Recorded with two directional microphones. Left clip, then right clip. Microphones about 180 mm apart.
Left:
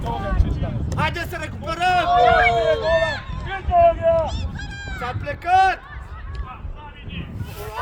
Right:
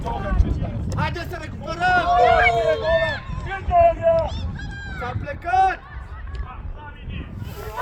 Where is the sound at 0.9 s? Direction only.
35° left (ahead or behind).